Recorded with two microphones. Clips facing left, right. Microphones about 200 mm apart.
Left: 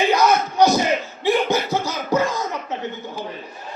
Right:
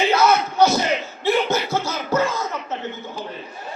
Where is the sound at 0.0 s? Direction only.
15° left (ahead or behind).